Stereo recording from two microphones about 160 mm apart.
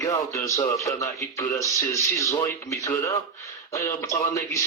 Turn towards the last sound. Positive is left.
turn(degrees=20)  # may be behind; listen again after turning